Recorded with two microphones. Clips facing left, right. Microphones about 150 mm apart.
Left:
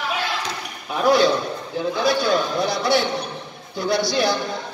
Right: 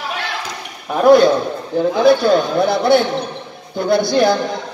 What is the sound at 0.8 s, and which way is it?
A man's voice, 50° right (ahead or behind).